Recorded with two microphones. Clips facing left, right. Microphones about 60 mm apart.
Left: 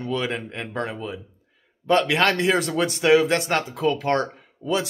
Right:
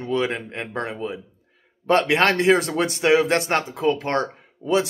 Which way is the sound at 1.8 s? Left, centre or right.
Right.